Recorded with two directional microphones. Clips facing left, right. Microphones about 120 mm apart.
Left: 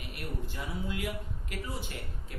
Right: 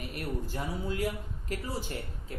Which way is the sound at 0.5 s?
40° right (ahead or behind).